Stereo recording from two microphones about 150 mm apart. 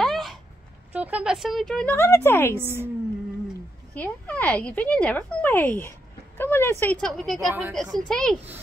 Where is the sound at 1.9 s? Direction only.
15° left (ahead or behind).